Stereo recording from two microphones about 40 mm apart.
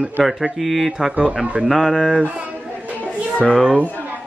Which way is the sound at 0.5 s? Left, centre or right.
Centre.